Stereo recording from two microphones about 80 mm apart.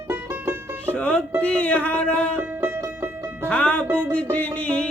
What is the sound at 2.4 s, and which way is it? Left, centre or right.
Music, right.